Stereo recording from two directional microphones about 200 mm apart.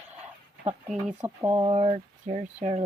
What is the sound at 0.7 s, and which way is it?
Speech, 35° right (ahead or behind).